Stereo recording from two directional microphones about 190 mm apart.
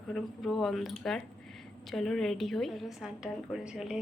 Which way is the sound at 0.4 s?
Centre (ahead or behind).